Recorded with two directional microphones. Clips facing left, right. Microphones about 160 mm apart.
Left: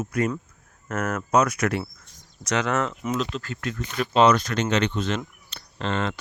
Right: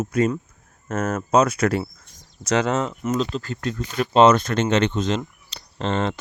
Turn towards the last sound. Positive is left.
turn(degrees=-30)  # may be behind; listen again after turning